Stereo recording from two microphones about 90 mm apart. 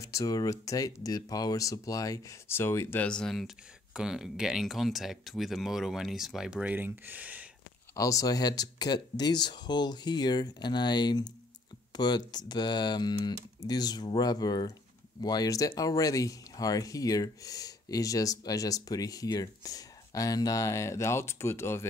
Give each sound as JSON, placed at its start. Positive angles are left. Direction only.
{"t": 0.0, "sound": "speech", "side_deg": 40}
{"t": 2.4, "sound": "speech", "side_deg": 25}
{"t": 3.0, "sound": "speech", "side_deg": 10}
{"t": 6.6, "sound": "speech", "side_deg": -20}
{"t": 7.9, "sound": "speech", "side_deg": 40}